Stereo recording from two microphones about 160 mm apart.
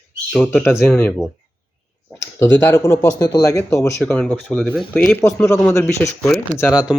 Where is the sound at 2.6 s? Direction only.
15° left (ahead or behind).